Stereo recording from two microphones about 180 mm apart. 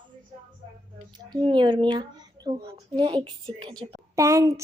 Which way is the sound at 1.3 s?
25° right (ahead or behind).